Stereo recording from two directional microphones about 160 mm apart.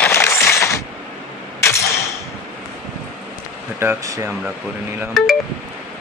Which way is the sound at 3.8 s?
20° right (ahead or behind).